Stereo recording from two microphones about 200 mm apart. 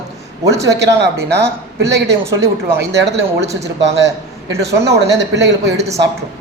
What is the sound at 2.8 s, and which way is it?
Speech, 60° right (ahead or behind).